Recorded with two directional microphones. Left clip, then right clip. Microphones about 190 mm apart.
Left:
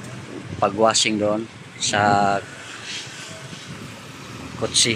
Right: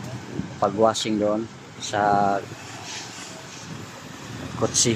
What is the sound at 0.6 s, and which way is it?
Speech, centre (ahead or behind).